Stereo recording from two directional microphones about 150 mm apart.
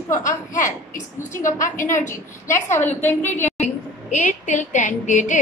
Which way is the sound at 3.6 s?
55° left (ahead or behind).